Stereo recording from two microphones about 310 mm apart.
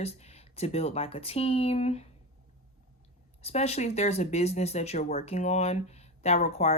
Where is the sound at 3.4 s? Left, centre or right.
Centre.